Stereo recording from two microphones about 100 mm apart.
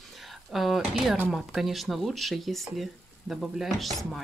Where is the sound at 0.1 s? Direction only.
Centre (ahead or behind).